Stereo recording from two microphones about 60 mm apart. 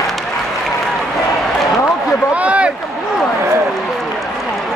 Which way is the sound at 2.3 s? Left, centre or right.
Right.